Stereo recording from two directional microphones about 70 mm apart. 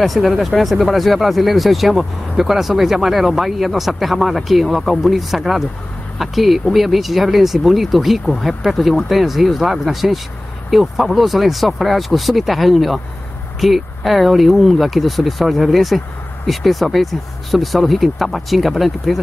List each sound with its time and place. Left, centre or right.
0.0 s speech: centre